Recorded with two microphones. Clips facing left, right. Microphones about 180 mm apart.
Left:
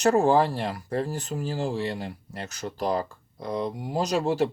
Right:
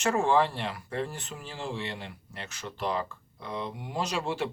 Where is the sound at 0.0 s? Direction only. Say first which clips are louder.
Left 5 dB; 40° left (ahead or behind).